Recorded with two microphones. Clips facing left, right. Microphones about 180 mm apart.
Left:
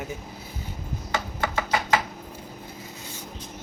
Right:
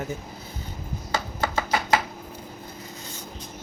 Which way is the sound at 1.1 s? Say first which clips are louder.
Right 1 dB; 35° right (ahead or behind).